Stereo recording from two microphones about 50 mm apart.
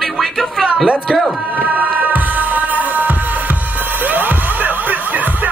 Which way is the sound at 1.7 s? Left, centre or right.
Right.